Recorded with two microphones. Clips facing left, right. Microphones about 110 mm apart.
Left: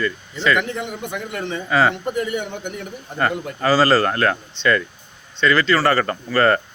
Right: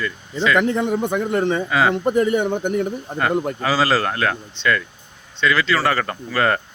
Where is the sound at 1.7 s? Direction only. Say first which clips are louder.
Left 6 dB; 5° right (ahead or behind).